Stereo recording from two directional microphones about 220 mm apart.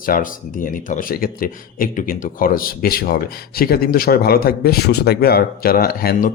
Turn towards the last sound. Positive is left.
turn(degrees=40)  # may be behind; listen again after turning